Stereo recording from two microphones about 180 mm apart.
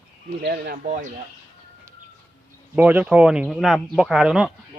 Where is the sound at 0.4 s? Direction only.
60° right (ahead or behind).